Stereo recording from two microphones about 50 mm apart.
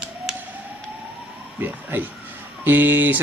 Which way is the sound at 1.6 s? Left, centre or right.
Right.